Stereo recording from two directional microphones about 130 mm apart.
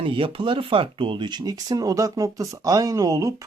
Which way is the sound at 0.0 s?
40° right (ahead or behind).